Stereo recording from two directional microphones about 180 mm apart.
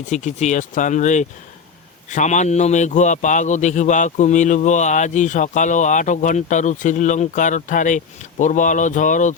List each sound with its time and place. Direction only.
0.0 s a man's voice: 40° left (ahead or behind)